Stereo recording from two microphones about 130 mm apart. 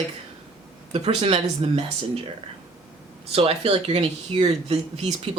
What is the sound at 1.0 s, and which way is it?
Speech, 55° right (ahead or behind).